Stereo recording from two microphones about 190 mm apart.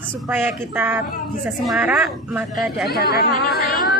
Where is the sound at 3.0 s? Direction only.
55° left (ahead or behind).